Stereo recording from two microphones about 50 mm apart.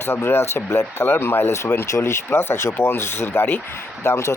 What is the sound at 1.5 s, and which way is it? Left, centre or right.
Speech, left.